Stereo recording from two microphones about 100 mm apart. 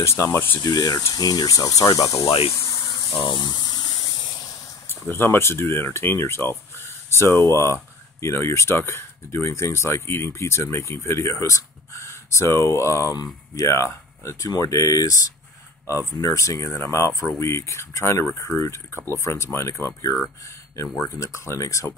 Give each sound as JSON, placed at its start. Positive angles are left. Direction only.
{"t": 0.0, "sound": "speech", "side_deg": 30}
{"t": 0.7, "sound": "speech", "side_deg": 40}
{"t": 2.2, "sound": "speech", "side_deg": 65}
{"t": 2.5, "sound": "a sound", "side_deg": 35}
{"t": 5.1, "sound": "speech", "side_deg": 20}
{"t": 13.1, "sound": "speech", "side_deg": 40}
{"t": 13.7, "sound": "speech", "side_deg": 30}